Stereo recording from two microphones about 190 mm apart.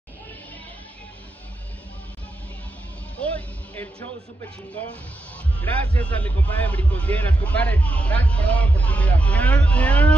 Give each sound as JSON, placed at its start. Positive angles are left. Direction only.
{"t": 3.2, "sound": "music", "side_deg": 10}
{"t": 5.6, "sound": "speech", "side_deg": 10}